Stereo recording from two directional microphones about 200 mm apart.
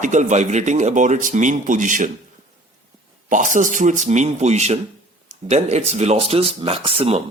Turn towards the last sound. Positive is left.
turn(degrees=-30)  # may be behind; listen again after turning